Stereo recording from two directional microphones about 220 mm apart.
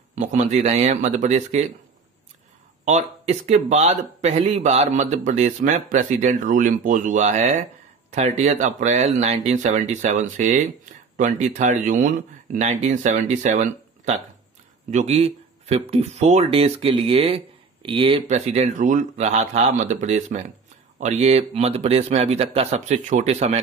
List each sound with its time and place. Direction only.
0.1 s speech: 30° right (ahead or behind)
2.8 s speech: 30° right (ahead or behind)